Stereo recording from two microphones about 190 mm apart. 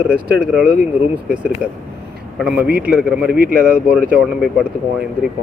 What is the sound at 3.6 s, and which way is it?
Speech, 5° right (ahead or behind).